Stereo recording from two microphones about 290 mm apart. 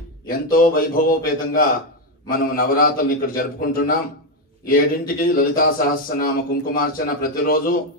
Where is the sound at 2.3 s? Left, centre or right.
Left.